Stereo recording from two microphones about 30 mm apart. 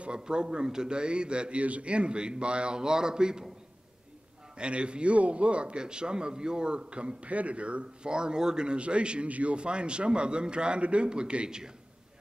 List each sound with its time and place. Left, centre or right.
0.2 s a man's voice: right
1.6 s a man's voice: right
2.8 s a man's voice: right
4.6 s a man's voice: right
8.1 s a man's voice: right
8.6 s a man's voice: right